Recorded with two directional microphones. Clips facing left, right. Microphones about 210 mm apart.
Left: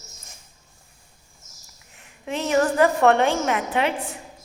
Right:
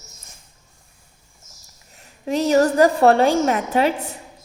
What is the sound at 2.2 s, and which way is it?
A woman's voice, 35° right (ahead or behind).